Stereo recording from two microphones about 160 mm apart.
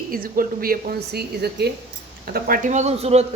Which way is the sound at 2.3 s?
65° right (ahead or behind).